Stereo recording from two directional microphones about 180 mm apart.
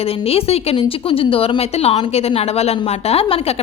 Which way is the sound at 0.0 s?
35° left (ahead or behind).